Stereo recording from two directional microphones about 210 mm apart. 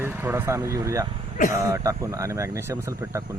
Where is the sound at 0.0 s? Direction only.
10° right (ahead or behind).